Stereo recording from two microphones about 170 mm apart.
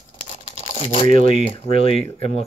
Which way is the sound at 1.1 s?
50° right (ahead or behind).